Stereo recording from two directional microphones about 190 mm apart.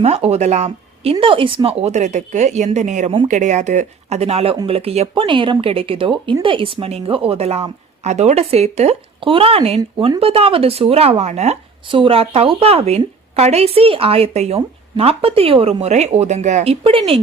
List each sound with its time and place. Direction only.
0.0 s speech: 35° right (ahead or behind)